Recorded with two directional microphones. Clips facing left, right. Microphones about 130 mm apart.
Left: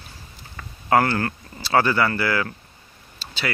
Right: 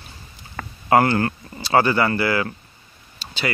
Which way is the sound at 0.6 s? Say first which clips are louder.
Right 7 dB; 70° right (ahead or behind).